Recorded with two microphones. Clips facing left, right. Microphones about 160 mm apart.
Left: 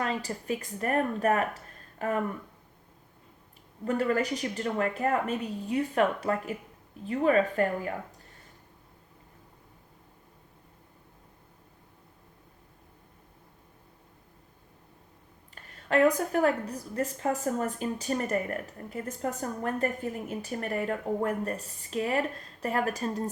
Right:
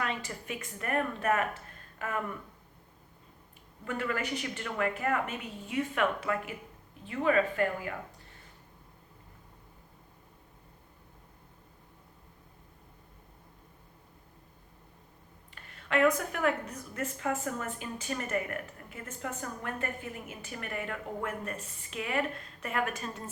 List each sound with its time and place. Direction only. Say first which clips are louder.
0.0 s a woman's voice: left 4 dB; 35° left (ahead or behind)
3.8 s a woman's voice: left 7 dB; 35° left (ahead or behind)
15.5 s a woman's voice: left 4 dB; 40° left (ahead or behind)